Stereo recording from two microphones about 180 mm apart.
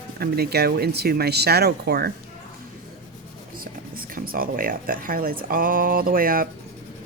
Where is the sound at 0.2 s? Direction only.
60° right (ahead or behind).